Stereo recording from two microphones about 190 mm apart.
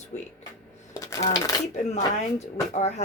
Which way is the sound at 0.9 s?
20° left (ahead or behind).